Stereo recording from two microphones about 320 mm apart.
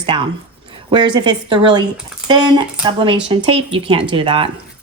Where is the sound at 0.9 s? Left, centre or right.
Centre.